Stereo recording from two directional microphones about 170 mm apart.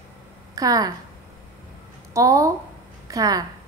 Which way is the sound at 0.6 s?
20° right (ahead or behind).